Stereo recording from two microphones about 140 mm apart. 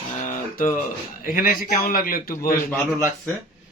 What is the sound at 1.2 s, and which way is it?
A man's voice, 90° left.